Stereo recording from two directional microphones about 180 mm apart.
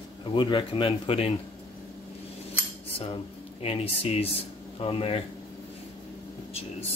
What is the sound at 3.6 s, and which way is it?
Speech, 35° left (ahead or behind).